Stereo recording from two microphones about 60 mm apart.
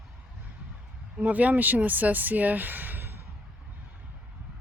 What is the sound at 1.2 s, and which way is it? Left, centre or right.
Speech, right.